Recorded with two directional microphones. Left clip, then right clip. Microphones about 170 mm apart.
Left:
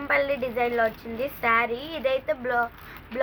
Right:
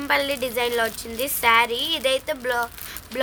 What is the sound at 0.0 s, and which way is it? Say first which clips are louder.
A woman's voice: right 2 dB; 60° right (ahead or behind).